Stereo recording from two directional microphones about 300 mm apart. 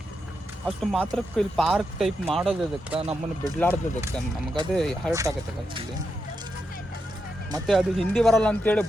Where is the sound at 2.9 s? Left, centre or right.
Centre.